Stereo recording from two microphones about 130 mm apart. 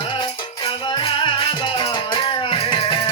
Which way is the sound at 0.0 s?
40° left (ahead or behind).